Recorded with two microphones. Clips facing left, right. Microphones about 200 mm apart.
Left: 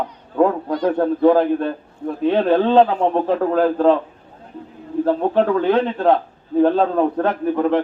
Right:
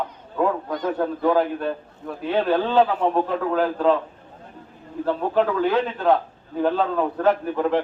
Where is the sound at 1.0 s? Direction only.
40° left (ahead or behind).